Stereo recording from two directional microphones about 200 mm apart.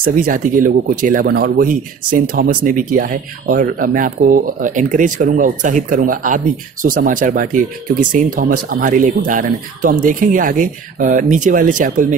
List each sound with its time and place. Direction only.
0.0 s speech: 45° right (ahead or behind)